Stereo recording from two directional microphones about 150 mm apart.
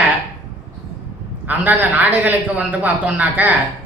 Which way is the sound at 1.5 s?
10° right (ahead or behind).